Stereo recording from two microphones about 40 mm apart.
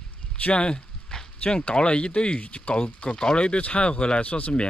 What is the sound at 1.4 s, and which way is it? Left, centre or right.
Speech, left.